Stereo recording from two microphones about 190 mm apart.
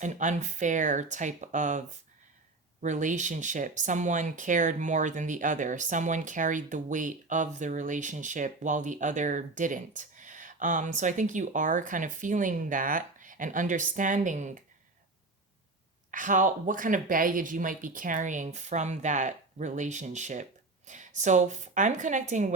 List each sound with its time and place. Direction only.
0.0 s speech: 40° right (ahead or behind)
2.8 s speech: 40° right (ahead or behind)
16.1 s speech: 45° right (ahead or behind)